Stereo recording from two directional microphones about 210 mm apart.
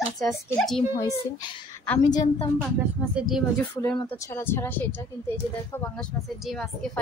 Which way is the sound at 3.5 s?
10° left (ahead or behind).